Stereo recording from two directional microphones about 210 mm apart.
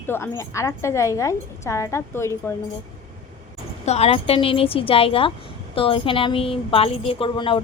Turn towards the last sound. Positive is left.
turn(degrees=25)  # may be behind; listen again after turning